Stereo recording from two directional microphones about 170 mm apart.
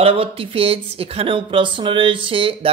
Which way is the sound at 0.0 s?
35° right (ahead or behind).